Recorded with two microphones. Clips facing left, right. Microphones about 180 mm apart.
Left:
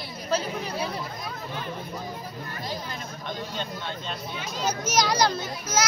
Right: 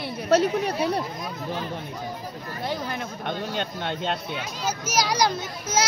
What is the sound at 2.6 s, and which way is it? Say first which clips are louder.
Speech: right 7 dB; 60° right (ahead or behind).